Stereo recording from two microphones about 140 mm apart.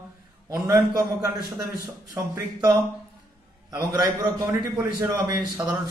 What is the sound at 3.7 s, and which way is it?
A man's voice, 25° right (ahead or behind).